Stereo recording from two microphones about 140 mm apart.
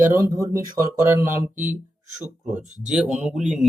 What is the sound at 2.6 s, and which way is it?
Speech, 55° right (ahead or behind).